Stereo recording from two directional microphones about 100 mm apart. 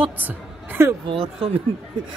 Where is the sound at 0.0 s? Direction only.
15° right (ahead or behind).